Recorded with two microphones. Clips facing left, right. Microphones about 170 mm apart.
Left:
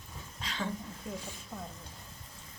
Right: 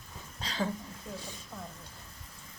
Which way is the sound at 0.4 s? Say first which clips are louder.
Right 4 dB; 35° right (ahead or behind).